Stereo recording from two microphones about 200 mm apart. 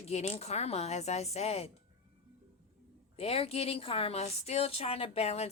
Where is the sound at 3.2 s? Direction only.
30° left (ahead or behind).